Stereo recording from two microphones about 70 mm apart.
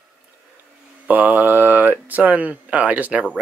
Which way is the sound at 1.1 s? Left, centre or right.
Right.